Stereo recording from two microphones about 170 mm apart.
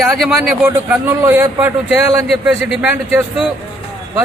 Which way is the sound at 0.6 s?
15° right (ahead or behind).